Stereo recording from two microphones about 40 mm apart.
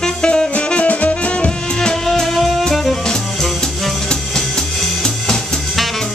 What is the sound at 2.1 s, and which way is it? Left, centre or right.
Music, centre.